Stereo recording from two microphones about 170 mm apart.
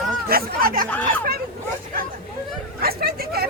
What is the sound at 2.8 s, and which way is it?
Speech, 65° right (ahead or behind).